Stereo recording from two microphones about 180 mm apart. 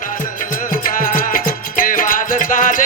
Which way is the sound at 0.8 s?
50° left (ahead or behind).